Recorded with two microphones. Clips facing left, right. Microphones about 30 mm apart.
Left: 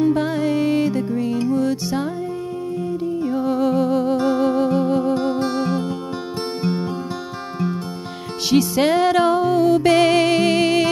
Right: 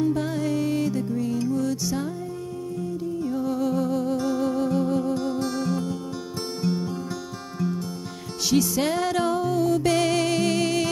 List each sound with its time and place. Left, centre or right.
0.0 s music: left
3.2 s music: left
8.5 s music: left